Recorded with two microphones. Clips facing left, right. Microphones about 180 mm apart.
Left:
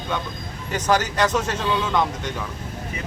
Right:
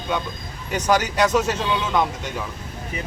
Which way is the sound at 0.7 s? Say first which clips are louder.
Right 1 dB; 10° right (ahead or behind).